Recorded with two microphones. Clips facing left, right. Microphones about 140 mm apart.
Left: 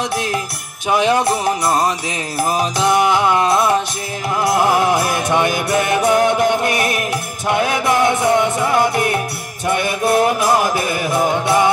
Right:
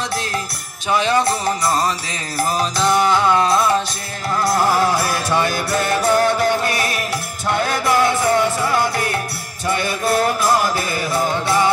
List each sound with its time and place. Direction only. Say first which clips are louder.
0.8 s music: left 2 dB; 15° left (ahead or behind)